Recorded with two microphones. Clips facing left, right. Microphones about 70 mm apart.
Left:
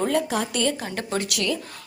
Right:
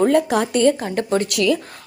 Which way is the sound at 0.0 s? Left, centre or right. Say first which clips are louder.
Right 7 dB; right.